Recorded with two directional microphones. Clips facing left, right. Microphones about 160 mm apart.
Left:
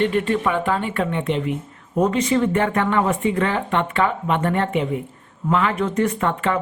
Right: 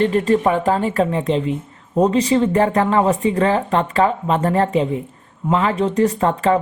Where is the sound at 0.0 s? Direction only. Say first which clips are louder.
Right 4 dB; 35° right (ahead or behind).